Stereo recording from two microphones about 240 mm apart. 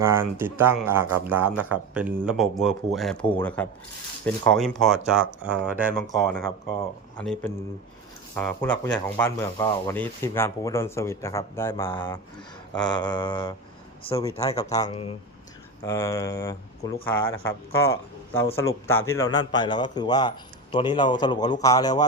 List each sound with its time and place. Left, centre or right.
0.0 s speech: centre